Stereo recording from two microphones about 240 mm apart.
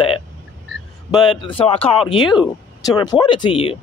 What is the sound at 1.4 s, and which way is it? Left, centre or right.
Speech, left.